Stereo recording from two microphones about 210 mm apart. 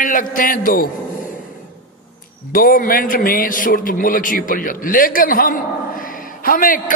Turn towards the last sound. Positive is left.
turn(degrees=40)  # may be behind; listen again after turning